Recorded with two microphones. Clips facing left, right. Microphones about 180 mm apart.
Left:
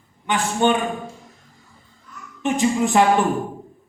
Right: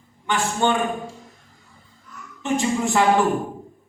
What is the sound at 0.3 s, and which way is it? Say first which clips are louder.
Speech: left 2 dB; 15° left (ahead or behind).